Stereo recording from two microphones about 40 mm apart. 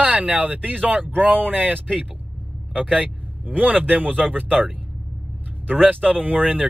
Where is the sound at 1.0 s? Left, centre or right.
Right.